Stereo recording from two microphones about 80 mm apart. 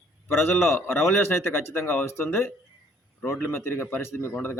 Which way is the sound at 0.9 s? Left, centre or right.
Left.